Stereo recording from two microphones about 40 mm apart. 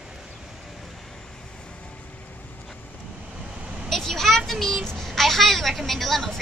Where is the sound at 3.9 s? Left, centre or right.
Centre.